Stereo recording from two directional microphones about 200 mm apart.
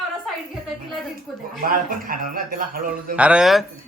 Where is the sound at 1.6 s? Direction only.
45° right (ahead or behind).